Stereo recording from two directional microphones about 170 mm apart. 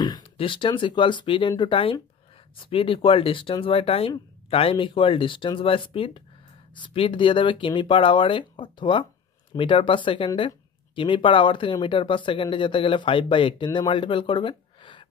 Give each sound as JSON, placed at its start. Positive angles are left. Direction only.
{"t": 0.0, "sound": "speech", "side_deg": 25}